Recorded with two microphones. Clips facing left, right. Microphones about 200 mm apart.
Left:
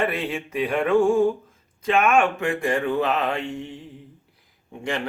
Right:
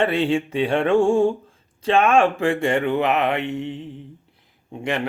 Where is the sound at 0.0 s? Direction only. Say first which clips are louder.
Right 6 dB; 30° right (ahead or behind).